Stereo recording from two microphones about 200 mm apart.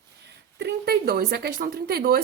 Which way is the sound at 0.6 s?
50° right (ahead or behind).